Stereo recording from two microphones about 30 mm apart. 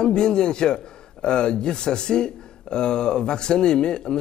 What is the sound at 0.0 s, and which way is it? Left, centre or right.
A man's voice, left.